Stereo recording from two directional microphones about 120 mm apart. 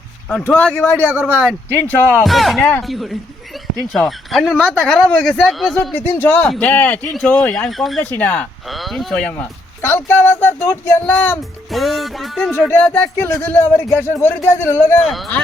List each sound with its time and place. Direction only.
0.4 s speech: 10° left (ahead or behind)
2.2 s speech: centre (ahead or behind)
5.9 s a man's voice: 20° left (ahead or behind); by 8.0 s centre (ahead or behind)
8.1 s speech: 15° left (ahead or behind)
8.6 s a man's voice: centre (ahead or behind); by 11.1 s 20° left (ahead or behind)
11.7 s speech: centre (ahead or behind)
12.5 s speech: 15° left (ahead or behind)
15.0 s speech: centre (ahead or behind)